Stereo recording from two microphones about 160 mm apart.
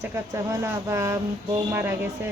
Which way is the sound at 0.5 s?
20° right (ahead or behind).